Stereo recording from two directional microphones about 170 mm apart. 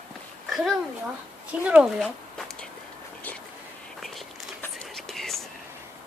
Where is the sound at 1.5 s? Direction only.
5° right (ahead or behind).